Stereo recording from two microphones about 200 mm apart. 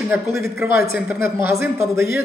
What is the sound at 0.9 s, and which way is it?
Speech, 10° right (ahead or behind).